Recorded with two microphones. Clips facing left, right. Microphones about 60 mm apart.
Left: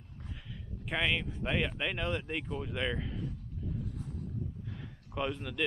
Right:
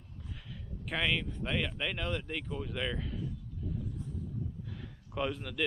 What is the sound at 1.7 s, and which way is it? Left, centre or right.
Speech, centre.